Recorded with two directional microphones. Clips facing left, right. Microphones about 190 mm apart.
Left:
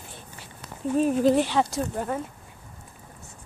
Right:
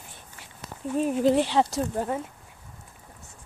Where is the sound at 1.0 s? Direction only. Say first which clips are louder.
Left 1 dB; 15° right (ahead or behind).